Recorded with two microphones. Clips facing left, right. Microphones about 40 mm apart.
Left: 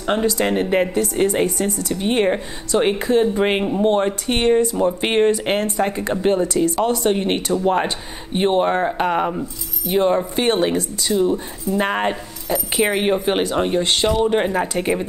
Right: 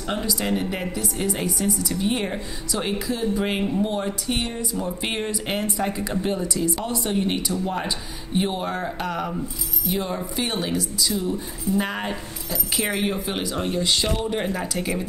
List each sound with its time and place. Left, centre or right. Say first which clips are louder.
0.0 s speech: left 7 dB; left
4.7 s speech: left 9 dB; left